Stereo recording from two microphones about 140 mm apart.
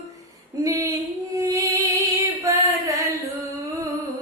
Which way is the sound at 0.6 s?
25° right (ahead or behind).